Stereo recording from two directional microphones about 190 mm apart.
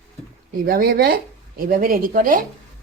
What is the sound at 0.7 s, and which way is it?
A woman's voice, 50° right (ahead or behind).